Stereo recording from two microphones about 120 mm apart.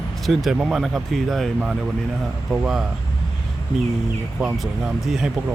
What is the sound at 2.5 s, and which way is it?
Speech, 5° right (ahead or behind).